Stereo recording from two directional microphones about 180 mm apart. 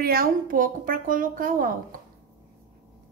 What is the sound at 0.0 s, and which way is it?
A woman's voice, 55° right (ahead or behind).